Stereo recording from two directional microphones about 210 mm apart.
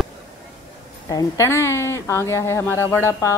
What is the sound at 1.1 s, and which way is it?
Speech, 15° left (ahead or behind).